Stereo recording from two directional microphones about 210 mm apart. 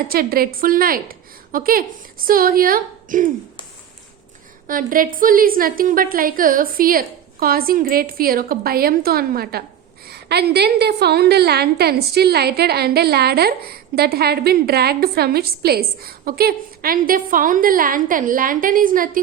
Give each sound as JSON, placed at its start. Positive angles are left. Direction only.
{"t": 0.1, "sound": "a woman's voice", "side_deg": -45}
{"t": 4.6, "sound": "a woman's voice", "side_deg": -40}